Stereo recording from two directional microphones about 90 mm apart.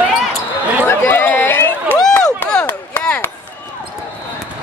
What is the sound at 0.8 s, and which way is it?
Chatter, 25° left (ahead or behind).